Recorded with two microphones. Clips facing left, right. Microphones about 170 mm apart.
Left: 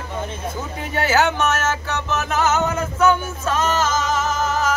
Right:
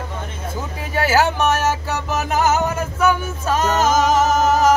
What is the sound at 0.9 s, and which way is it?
Music, 5° right (ahead or behind).